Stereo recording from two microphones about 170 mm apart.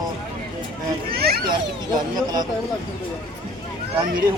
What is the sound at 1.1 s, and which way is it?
Speech, 65° right (ahead or behind).